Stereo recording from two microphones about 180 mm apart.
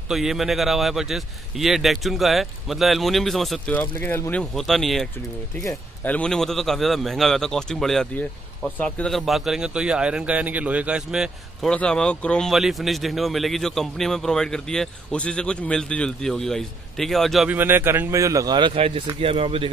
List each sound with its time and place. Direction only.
0.1 s speech: centre (ahead or behind)
17.6 s speech: 10° right (ahead or behind); by 19.7 s 30° right (ahead or behind)